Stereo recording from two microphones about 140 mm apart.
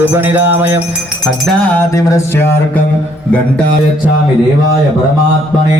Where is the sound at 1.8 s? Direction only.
20° left (ahead or behind).